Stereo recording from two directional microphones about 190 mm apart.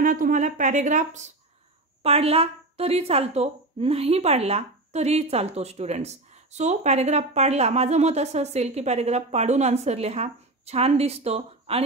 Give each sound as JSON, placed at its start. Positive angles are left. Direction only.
{"t": 0.0, "sound": "a woman's voice", "side_deg": -45}